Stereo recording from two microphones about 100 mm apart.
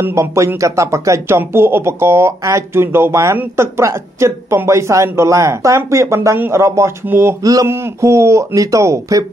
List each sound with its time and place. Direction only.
0.0 s speech: 30° right (ahead or behind)